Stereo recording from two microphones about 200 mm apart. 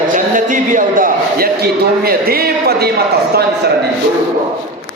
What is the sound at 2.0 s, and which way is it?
Speech, 50° right (ahead or behind).